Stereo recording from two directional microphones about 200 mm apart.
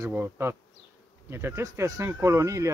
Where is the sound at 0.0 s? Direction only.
10° right (ahead or behind).